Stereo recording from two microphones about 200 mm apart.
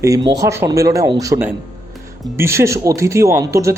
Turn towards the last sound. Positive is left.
turn(degrees=-15)  # may be behind; listen again after turning